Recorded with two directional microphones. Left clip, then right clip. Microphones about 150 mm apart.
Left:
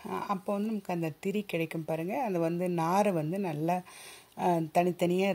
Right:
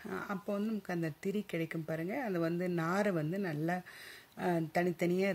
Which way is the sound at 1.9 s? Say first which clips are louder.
Left 6 dB; 30° left (ahead or behind).